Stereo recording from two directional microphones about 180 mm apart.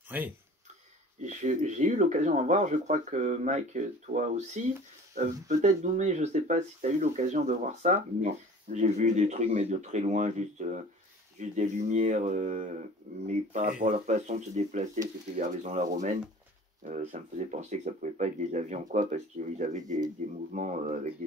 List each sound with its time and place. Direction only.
0.1 s speech: 10° right (ahead or behind)
1.2 s speech: 45° right (ahead or behind)